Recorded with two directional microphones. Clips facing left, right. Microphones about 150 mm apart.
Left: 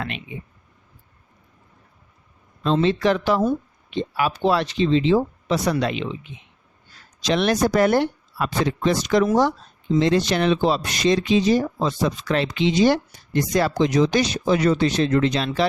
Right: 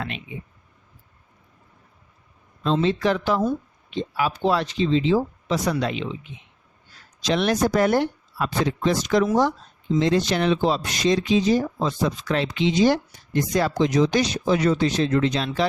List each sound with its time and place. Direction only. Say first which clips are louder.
2.6 s speech: left 2 dB; 65° left (ahead or behind)
7.3 s speech: left 1 dB; 80° left